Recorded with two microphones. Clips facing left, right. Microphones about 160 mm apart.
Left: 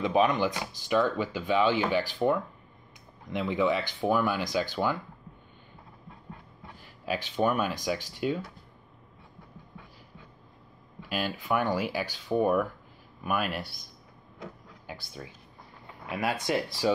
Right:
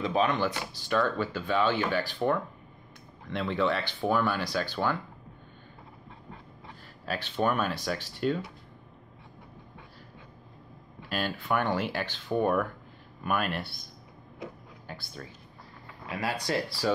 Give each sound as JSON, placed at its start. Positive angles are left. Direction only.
{"t": 0.0, "sound": "speech", "side_deg": 15}
{"t": 3.3, "sound": "speech", "side_deg": 15}
{"t": 7.1, "sound": "speech", "side_deg": 15}
{"t": 11.1, "sound": "speech", "side_deg": 10}
{"t": 14.9, "sound": "speech", "side_deg": 10}